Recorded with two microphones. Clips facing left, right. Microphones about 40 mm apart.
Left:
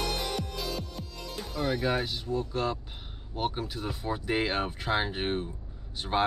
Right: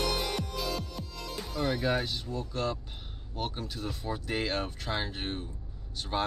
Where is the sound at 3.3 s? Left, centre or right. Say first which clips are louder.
Left 4 dB; centre.